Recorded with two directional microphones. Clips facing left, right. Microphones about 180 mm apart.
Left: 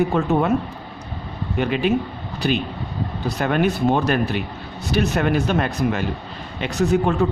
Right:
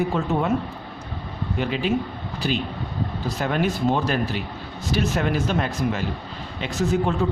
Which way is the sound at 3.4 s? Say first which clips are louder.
Left 4 dB; 60° left (ahead or behind).